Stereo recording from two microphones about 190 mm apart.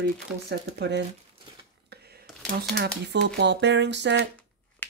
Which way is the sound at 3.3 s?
65° right (ahead or behind).